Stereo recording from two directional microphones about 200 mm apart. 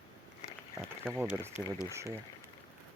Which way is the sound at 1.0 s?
10° right (ahead or behind).